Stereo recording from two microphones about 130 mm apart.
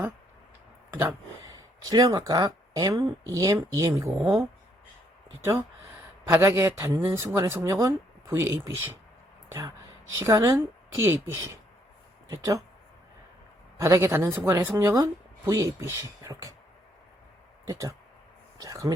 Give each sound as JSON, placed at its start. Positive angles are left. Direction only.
{"t": 1.8, "sound": "speech", "side_deg": -30}
{"t": 13.7, "sound": "speech", "side_deg": -25}
{"t": 17.7, "sound": "speech", "side_deg": -25}